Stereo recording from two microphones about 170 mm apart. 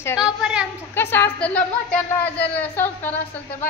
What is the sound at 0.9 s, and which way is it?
A woman's voice, 10° left (ahead or behind).